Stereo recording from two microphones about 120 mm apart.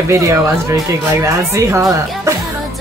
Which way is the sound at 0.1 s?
25° right (ahead or behind).